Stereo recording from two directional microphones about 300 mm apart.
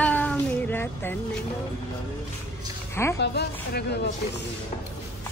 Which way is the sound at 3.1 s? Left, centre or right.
Left.